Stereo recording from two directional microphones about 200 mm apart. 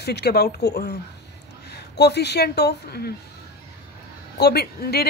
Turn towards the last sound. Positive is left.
turn(degrees=50)  # may be behind; listen again after turning